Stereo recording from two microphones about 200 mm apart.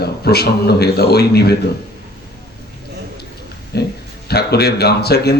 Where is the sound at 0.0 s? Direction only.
50° left (ahead or behind).